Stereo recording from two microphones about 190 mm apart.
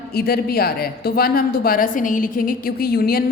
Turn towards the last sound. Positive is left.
turn(degrees=50)  # may be behind; listen again after turning